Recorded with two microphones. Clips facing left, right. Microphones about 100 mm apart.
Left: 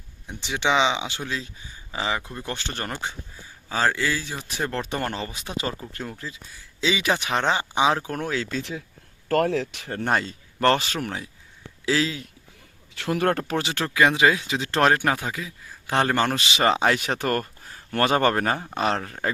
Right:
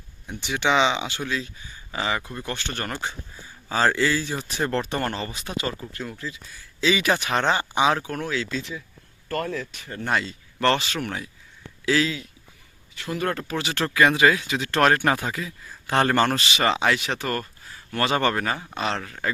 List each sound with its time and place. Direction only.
0.3 s speech: 20° left (ahead or behind)
3.7 s a man's voice: 5° left (ahead or behind)
5.5 s speech: 30° left (ahead or behind)
6.8 s a man's voice: 20° left (ahead or behind)
7.9 s speech: 30° left (ahead or behind)
9.3 s speech: 80° left
10.1 s speech: 40° left (ahead or behind)
12.9 s speech: 65° left (ahead or behind)
13.7 s a man's voice: 10° left (ahead or behind)
15.0 s a man's voice: 5° left (ahead or behind)
16.6 s speech: 35° left (ahead or behind)